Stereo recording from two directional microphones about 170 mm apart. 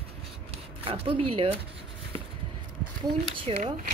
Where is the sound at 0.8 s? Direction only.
35° right (ahead or behind).